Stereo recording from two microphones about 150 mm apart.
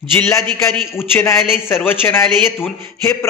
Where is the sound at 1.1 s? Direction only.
15° left (ahead or behind).